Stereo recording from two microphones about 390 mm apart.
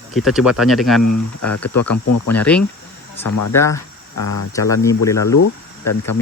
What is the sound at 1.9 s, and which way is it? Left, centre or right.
Speech, left.